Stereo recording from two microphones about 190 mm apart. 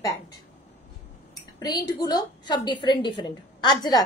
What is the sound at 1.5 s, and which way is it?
A woman's voice, 20° left (ahead or behind).